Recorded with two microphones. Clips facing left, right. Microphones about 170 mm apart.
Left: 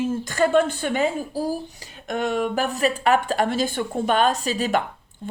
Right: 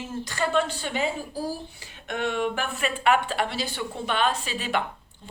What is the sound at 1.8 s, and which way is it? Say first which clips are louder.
Speech: left 4 dB; 40° left (ahead or behind).